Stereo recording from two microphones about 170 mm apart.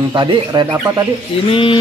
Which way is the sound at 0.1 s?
25° right (ahead or behind).